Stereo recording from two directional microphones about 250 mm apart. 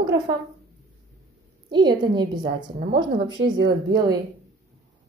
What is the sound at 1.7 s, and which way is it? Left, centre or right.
Speech, centre.